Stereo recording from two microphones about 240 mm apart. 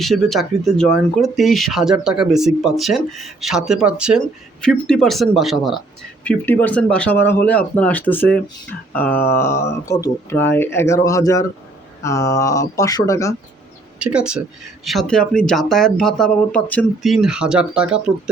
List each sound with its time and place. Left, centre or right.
0.0 s speech: centre
14.0 s speech: centre